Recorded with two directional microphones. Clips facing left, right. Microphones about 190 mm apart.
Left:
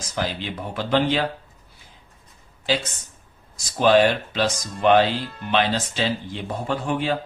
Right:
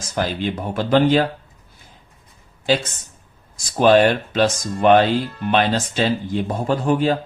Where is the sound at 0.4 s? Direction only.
45° right (ahead or behind).